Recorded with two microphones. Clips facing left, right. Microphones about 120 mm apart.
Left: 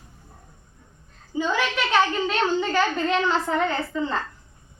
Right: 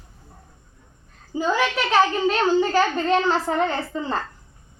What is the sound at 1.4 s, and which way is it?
A child's voice, 40° right (ahead or behind).